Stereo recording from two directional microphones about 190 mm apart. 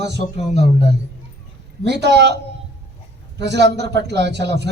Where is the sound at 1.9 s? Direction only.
65° right (ahead or behind).